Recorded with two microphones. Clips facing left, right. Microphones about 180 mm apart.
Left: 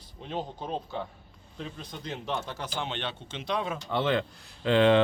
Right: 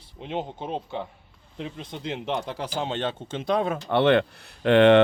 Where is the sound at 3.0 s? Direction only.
45° right (ahead or behind).